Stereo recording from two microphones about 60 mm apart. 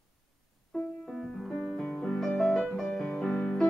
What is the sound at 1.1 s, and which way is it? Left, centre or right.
Music, centre.